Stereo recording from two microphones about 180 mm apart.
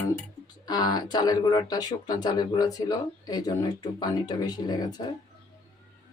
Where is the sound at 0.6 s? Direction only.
25° left (ahead or behind).